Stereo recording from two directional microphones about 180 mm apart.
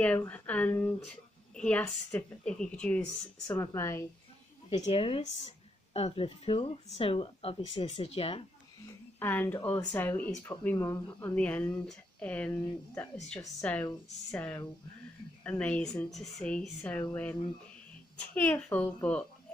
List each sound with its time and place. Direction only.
0.0 s speech: 10° left (ahead or behind)
3.4 s speech: 15° left (ahead or behind)
4.6 s speech: 35° left (ahead or behind)
8.8 s speech: 10° left (ahead or behind)